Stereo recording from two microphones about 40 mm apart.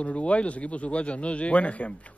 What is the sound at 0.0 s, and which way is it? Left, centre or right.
A man's voice, left.